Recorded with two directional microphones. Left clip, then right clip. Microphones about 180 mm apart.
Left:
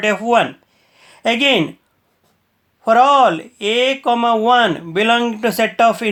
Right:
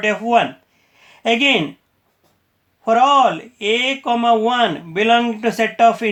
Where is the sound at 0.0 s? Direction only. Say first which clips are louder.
Left 1 dB; 40° left (ahead or behind).